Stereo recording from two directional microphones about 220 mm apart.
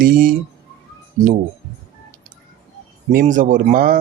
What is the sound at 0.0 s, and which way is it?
Speech, 40° right (ahead or behind).